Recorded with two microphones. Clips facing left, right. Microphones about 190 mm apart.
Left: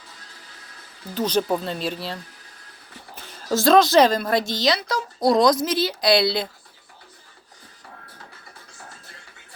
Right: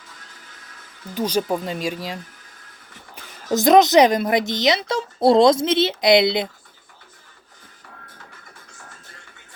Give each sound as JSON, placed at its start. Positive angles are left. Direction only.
{"t": 1.1, "sound": "speech", "side_deg": -10}
{"t": 3.5, "sound": "speech", "side_deg": -20}